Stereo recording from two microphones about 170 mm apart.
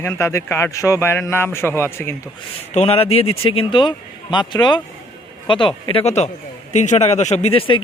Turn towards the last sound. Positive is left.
turn(degrees=30)  # may be behind; listen again after turning